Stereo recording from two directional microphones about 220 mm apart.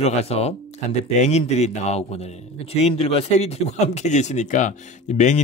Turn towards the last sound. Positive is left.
turn(degrees=30)  # may be behind; listen again after turning